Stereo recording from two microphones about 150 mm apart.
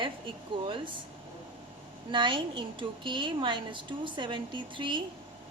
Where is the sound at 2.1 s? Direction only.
30° right (ahead or behind).